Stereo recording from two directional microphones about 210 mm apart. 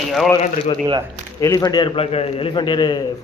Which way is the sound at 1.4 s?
15° left (ahead or behind).